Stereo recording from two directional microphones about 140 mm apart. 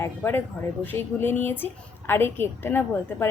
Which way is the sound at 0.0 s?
15° left (ahead or behind).